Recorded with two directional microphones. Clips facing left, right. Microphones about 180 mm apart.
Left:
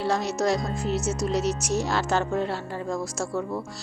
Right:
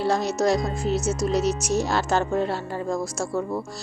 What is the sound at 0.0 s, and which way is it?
Speech, 40° right (ahead or behind).